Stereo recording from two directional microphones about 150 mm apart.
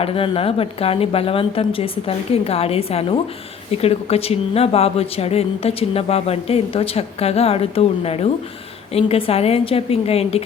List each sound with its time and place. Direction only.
0.0 s speech: 40° left (ahead or behind)